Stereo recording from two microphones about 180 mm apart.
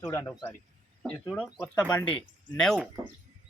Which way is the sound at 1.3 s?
5° left (ahead or behind).